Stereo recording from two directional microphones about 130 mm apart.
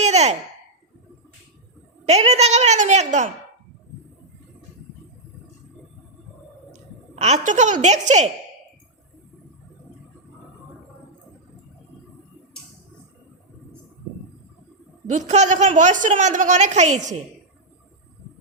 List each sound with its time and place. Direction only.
0.0 s a sound: 60° right (ahead or behind)
2.0 s a woman's voice: 55° right (ahead or behind)
7.2 s a woman's voice: 65° right (ahead or behind)
15.0 s a woman's voice: 70° right (ahead or behind)